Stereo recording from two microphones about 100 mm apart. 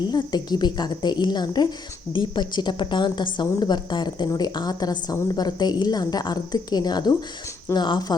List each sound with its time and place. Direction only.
0.1 s a woman's voice: 45° left (ahead or behind)